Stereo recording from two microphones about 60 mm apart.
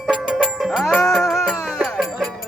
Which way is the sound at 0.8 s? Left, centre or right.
Centre.